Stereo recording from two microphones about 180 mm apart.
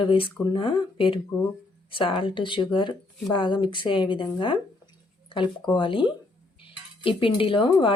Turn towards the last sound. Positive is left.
turn(degrees=30)  # may be behind; listen again after turning